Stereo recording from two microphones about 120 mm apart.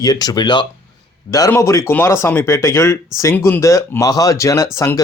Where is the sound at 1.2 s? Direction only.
30° left (ahead or behind).